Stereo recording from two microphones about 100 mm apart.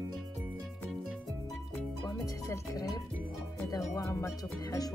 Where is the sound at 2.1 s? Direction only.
35° left (ahead or behind).